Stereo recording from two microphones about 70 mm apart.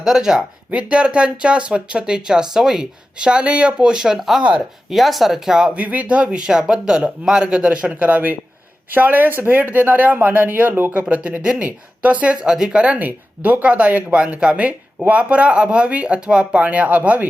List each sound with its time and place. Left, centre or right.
0.0 s speech: centre
5.7 s speech: right
11.0 s speech: centre